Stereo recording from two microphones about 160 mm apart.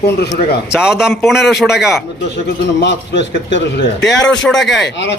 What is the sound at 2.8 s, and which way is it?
A man's voice, 90° left.